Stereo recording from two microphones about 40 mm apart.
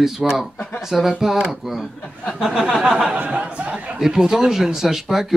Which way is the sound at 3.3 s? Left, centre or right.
Right.